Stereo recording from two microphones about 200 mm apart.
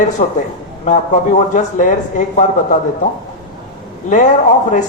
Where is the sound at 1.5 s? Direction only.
40° left (ahead or behind).